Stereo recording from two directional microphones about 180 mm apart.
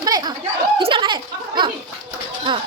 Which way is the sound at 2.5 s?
25° right (ahead or behind).